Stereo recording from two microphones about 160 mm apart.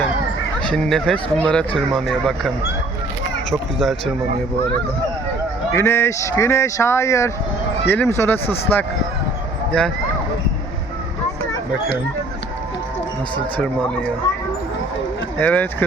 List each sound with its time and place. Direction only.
0.7 s speech: centre (ahead or behind)
3.5 s speech: centre (ahead or behind)
5.7 s speech: 15° left (ahead or behind)
15.4 s speech: 10° left (ahead or behind)